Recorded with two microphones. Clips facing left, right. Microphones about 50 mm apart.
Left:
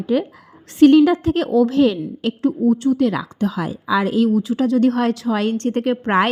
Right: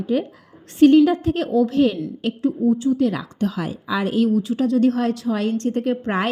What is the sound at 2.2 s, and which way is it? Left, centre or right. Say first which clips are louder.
Speech: left 2 dB; left.